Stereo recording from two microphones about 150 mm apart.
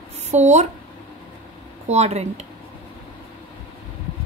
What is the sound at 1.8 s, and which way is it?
Speech, 50° right (ahead or behind).